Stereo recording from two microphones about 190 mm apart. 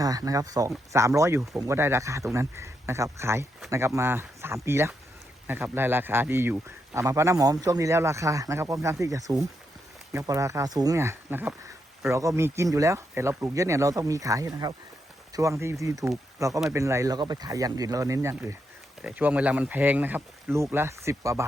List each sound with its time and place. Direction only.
0.0 s a man's voice: 20° right (ahead or behind)